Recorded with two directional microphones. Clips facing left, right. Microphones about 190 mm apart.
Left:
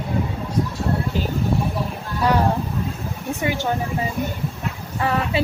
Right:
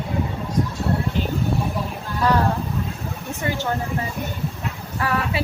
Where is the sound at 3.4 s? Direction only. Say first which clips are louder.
Left 2 dB; 15° left (ahead or behind).